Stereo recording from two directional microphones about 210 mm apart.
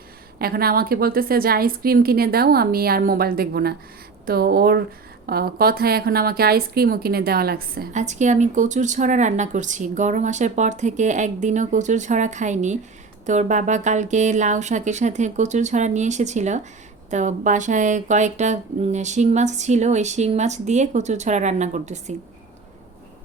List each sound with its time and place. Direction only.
0.3 s a woman's voice: 45° right (ahead or behind)